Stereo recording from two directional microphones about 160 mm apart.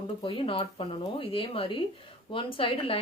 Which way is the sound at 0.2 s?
35° left (ahead or behind).